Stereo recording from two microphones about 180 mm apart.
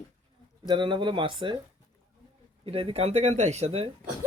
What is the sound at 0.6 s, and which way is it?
Speech, 25° right (ahead or behind).